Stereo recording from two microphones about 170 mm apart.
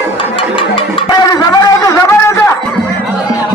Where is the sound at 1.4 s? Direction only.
20° left (ahead or behind).